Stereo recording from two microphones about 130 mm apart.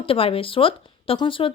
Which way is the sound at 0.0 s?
45° left (ahead or behind).